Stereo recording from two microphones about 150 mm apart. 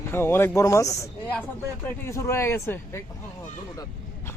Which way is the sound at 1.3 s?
10° left (ahead or behind).